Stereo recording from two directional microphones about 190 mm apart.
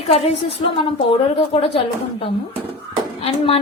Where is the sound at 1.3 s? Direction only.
30° left (ahead or behind).